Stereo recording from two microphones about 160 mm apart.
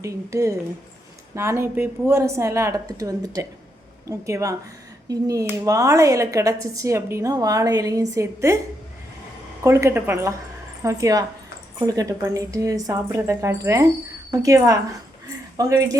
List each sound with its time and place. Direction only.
0.0 s a woman's voice: 20° right (ahead or behind)
9.6 s a woman's voice: 15° right (ahead or behind)